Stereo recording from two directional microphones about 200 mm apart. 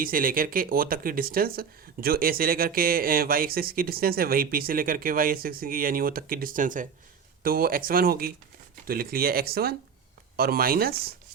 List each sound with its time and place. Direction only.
0.0 s speech: 45° right (ahead or behind)